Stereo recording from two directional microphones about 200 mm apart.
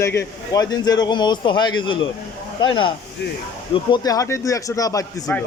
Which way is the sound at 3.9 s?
20° left (ahead or behind).